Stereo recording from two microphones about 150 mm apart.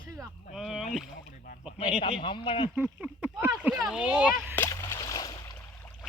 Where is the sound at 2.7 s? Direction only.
10° right (ahead or behind).